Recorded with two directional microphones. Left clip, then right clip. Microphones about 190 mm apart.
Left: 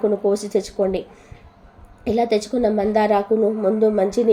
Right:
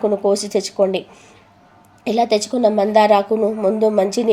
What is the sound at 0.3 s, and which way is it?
Speech, 15° right (ahead or behind).